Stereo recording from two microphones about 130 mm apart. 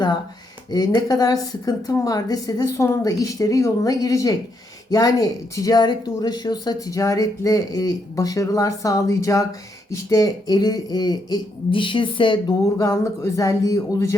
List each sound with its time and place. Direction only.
0.7 s speech: 30° left (ahead or behind)